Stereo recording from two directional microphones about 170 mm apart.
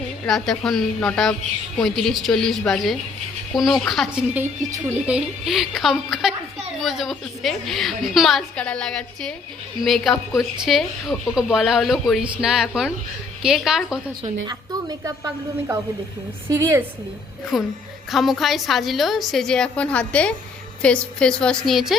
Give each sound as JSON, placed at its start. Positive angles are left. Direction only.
{"t": 0.3, "sound": "a woman's voice", "side_deg": 0}
{"t": 4.4, "sound": "a woman's voice", "side_deg": -20}
{"t": 5.0, "sound": "a woman's voice", "side_deg": -5}
{"t": 14.4, "sound": "a woman's voice", "side_deg": -25}
{"t": 17.5, "sound": "a woman's voice", "side_deg": 0}